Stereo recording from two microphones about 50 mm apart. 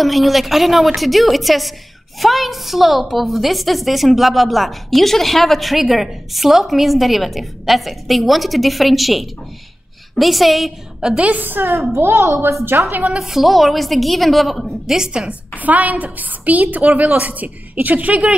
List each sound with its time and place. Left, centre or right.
0.0 s a woman's voice: centre
11.0 s a woman's voice: centre
11.2 s a woman's voice: right
11.9 s a woman's voice: right
12.7 s a woman's voice: right
13.2 s a woman's voice: centre
15.0 s speech: centre
15.6 s a woman's voice: right